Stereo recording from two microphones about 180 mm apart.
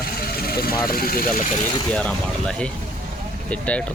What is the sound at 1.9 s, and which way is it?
Speech, 5° left (ahead or behind).